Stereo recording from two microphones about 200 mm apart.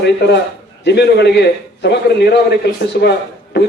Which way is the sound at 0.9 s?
55° left (ahead or behind).